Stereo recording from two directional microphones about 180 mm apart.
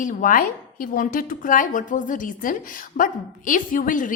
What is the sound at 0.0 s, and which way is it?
Speech, 50° left (ahead or behind).